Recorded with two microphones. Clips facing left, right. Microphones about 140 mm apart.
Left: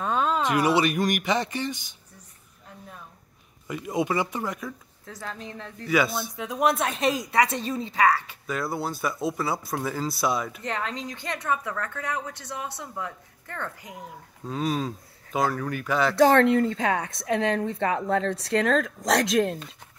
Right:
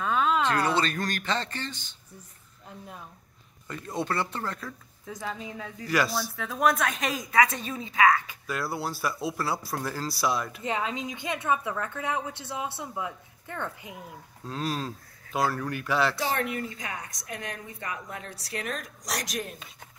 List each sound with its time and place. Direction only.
0.0 s a sound: 40° left (ahead or behind)
0.4 s speech: 15° left (ahead or behind)
3.6 s speech: 15° left (ahead or behind)
5.0 s speech: 10° right (ahead or behind)
6.3 s a woman's voice: 20° left (ahead or behind)
8.5 s speech: 5° right (ahead or behind)
11.1 s a woman's voice: 20° right (ahead or behind)
14.4 s speech: centre (ahead or behind)
16.2 s a woman's voice: 90° left
18.9 s speech: 80° left